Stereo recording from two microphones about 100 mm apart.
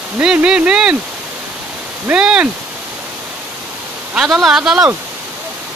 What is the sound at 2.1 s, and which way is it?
Speech, 10° right (ahead or behind).